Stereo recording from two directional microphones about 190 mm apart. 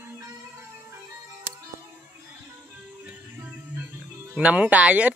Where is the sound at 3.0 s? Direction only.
10° right (ahead or behind).